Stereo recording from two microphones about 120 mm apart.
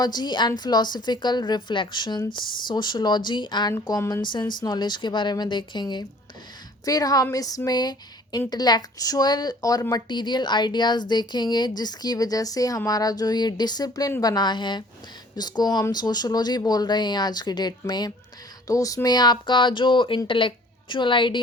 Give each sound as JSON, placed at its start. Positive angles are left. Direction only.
{"t": 0.0, "sound": "a woman's voice", "side_deg": 35}